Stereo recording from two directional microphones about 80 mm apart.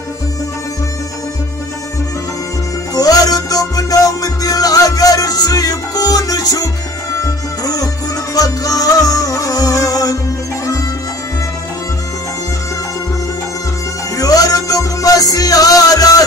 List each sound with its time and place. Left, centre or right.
2.9 s music: left
14.1 s music: left